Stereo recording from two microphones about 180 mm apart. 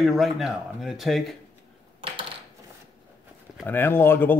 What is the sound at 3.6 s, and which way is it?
Speech, 10° left (ahead or behind).